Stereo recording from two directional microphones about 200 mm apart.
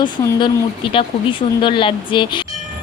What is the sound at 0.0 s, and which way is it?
Speech, 20° left (ahead or behind).